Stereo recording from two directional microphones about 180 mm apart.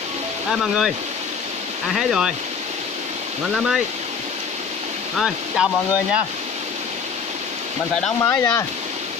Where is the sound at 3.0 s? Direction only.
40° right (ahead or behind).